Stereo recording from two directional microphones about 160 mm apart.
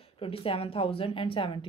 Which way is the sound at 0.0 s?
35° left (ahead or behind).